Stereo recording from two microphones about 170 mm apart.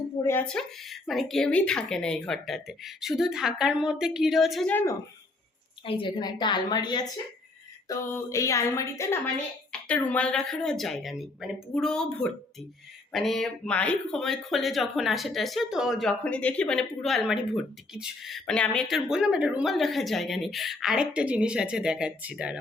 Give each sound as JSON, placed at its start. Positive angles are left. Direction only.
{"t": 0.3, "sound": "speech", "side_deg": 10}
{"t": 4.7, "sound": "speech", "side_deg": 15}
{"t": 5.8, "sound": "speech", "side_deg": 30}